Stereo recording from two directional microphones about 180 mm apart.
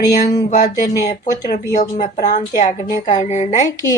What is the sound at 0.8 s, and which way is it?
Speech, 20° left (ahead or behind).